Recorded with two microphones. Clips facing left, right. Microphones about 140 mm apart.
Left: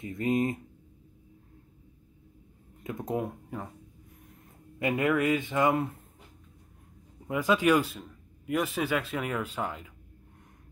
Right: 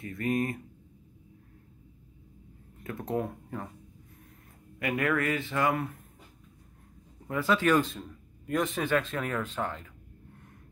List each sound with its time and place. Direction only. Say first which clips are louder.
0.0 s speech: left 2 dB; 20° left (ahead or behind)
2.8 s a sound: even; 15° left (ahead or behind)
4.7 s speech: left 2 dB; 20° left (ahead or behind)
7.2 s speech: left 1 dB; 15° left (ahead or behind)